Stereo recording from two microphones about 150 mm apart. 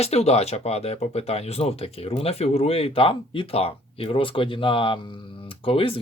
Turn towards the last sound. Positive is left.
turn(degrees=35)  # may be behind; listen again after turning